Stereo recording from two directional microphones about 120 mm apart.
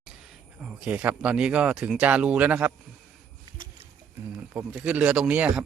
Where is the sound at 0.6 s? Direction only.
10° right (ahead or behind).